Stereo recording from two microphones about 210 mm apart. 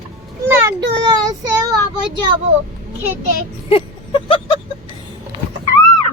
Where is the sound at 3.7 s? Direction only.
25° left (ahead or behind).